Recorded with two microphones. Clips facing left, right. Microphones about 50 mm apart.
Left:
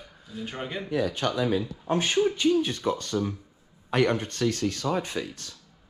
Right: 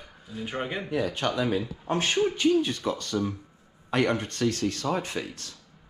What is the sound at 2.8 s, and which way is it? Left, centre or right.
Speech, left.